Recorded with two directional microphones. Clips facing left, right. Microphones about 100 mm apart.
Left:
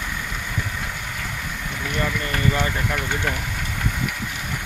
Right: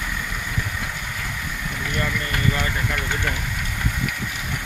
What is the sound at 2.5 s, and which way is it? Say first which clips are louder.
Speech: left 2 dB; 25° left (ahead or behind).